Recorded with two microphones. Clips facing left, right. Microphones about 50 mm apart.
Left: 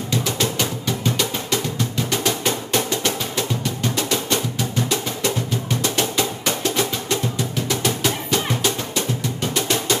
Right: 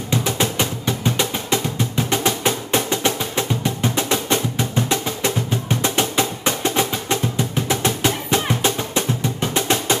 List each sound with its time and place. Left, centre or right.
0.1 s music: right